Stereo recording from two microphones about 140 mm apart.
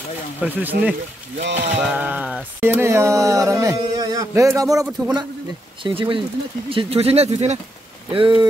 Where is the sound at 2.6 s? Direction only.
15° right (ahead or behind).